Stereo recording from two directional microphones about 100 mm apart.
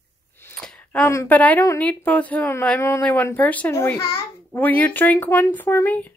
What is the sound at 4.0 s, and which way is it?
Speech, 25° left (ahead or behind).